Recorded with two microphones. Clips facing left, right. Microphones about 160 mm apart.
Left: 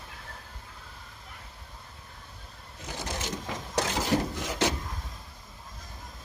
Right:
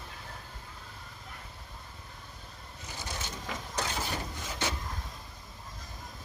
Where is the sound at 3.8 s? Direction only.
90° left.